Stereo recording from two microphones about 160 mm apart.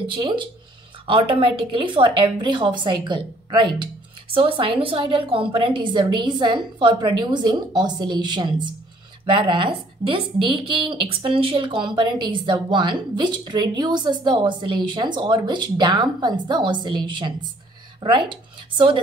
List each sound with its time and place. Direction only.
0.0 s speech: 30° right (ahead or behind)